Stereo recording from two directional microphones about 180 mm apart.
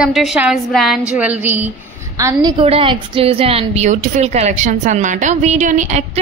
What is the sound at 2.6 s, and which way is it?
A woman's voice, 30° right (ahead or behind).